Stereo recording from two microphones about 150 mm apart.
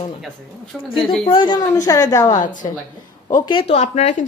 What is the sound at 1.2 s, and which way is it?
A woman's voice, 30° left (ahead or behind).